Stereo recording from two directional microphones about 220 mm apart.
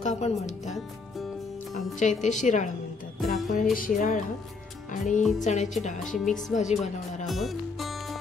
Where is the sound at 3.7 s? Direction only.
35° left (ahead or behind).